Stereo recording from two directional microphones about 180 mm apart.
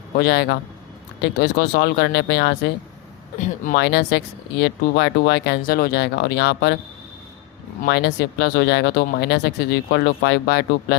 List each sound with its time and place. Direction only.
0.2 s speech: 65° left (ahead or behind)
3.8 s speech: 65° left (ahead or behind)
7.9 s speech: 65° left (ahead or behind)